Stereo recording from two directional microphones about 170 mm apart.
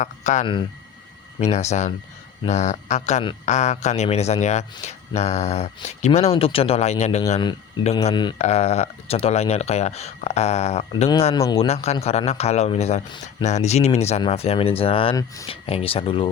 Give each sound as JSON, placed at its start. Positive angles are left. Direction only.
{"t": 0.0, "sound": "speech", "side_deg": 45}
{"t": 8.4, "sound": "speech", "side_deg": 40}